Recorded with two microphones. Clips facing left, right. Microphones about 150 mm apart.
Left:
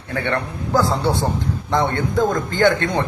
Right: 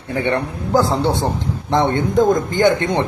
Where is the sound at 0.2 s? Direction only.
20° right (ahead or behind).